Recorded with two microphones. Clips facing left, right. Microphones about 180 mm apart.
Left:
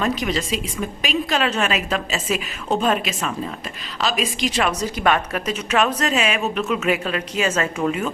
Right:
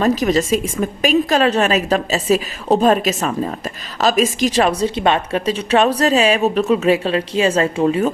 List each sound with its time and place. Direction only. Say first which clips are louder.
0.0 s a woman's voice: right 7 dB; 40° right (ahead or behind)